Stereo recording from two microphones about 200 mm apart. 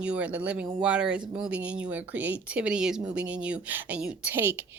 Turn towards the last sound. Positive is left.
turn(degrees=-10)  # may be behind; listen again after turning